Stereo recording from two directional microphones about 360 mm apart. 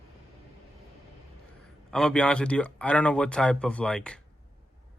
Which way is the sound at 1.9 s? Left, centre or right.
Centre.